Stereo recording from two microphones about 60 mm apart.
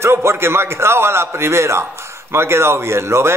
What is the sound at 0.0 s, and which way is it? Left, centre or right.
Speech, right.